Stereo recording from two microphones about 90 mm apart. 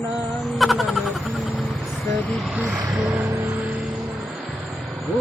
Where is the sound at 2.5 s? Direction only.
10° right (ahead or behind).